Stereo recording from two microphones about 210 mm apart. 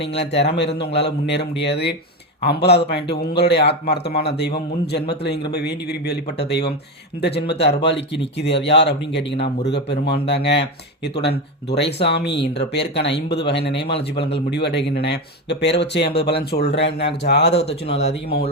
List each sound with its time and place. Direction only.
0.0 s a man's voice: 55° left (ahead or behind)
17.5 s speech: 30° left (ahead or behind)